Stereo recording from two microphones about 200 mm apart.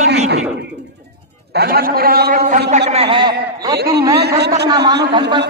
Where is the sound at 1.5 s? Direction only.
50° right (ahead or behind).